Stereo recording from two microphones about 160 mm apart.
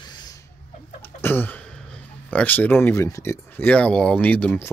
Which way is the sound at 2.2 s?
10° left (ahead or behind).